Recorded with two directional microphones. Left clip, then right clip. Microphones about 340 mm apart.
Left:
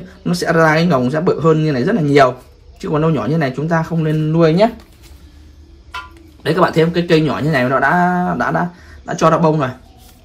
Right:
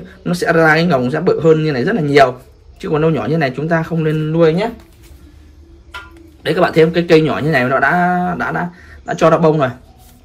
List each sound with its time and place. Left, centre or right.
0.2 s speech: centre
6.4 s speech: centre